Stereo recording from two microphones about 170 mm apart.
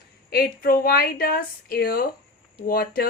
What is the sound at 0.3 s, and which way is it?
A woman's voice, 60° left (ahead or behind).